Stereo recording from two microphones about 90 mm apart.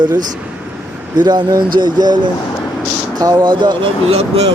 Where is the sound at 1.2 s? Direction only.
55° right (ahead or behind).